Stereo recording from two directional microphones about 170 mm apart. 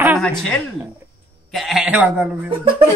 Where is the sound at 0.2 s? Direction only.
5° left (ahead or behind).